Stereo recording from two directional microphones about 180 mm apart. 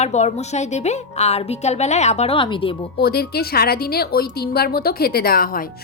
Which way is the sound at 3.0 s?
60° left (ahead or behind).